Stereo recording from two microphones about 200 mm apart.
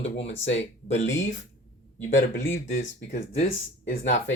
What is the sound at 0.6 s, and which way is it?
Speech, 35° left (ahead or behind).